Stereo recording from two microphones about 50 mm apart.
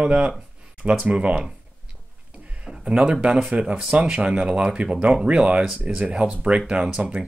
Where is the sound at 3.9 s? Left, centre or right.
Right.